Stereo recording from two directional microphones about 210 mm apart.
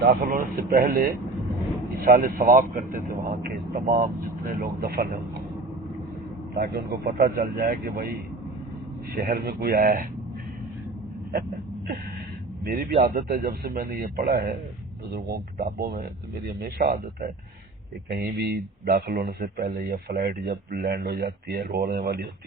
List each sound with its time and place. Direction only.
0.3 s a man's voice: 40° right (ahead or behind)
6.7 s speech: 50° right (ahead or behind)
9.1 s speech: 45° right (ahead or behind)
12.6 s speech: 45° right (ahead or behind)